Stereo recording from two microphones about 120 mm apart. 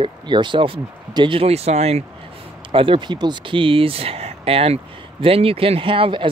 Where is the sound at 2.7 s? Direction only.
45° right (ahead or behind).